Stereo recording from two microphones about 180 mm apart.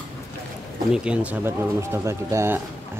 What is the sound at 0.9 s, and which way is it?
Speech, 5° right (ahead or behind).